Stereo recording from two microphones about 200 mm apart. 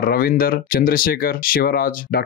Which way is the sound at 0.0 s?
50° left (ahead or behind).